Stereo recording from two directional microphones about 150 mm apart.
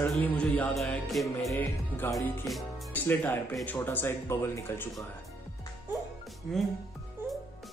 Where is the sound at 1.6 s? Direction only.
10° left (ahead or behind).